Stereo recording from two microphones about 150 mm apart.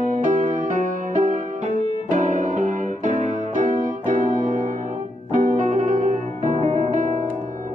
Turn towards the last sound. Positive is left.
turn(degrees=-45)  # may be behind; listen again after turning